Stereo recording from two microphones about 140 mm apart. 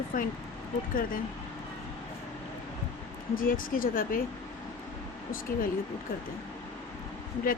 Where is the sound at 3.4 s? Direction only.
90° left.